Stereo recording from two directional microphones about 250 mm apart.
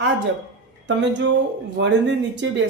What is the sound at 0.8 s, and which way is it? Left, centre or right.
Speech, right.